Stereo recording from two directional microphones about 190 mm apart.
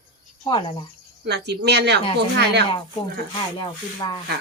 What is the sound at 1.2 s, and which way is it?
Speech, 60° right (ahead or behind).